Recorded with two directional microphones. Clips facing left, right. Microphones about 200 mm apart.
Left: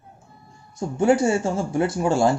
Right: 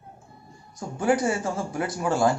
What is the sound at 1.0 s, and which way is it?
Speech, 25° left (ahead or behind).